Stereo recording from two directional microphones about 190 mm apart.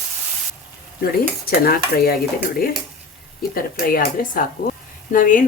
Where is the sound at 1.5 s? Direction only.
50° left (ahead or behind).